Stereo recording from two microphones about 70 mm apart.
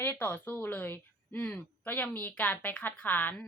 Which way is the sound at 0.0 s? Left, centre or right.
Left.